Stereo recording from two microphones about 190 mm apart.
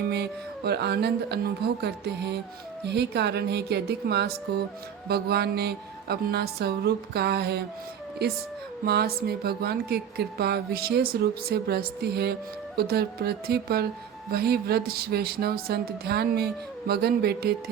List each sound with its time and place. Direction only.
0.1 s speech: 60° right (ahead or behind)
8.8 s speech: 55° right (ahead or behind)